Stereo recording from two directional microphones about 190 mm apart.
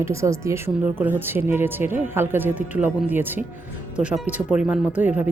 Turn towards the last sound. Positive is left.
turn(degrees=-5)  # may be behind; listen again after turning